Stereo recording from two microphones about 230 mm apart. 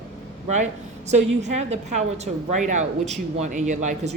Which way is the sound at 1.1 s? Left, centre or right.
Right.